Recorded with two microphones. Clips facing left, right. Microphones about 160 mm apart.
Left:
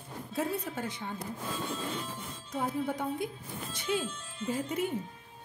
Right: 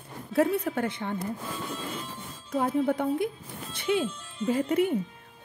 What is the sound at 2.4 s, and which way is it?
Speech, 55° right (ahead or behind).